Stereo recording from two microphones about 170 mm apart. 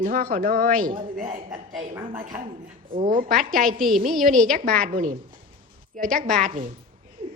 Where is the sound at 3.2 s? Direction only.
50° right (ahead or behind).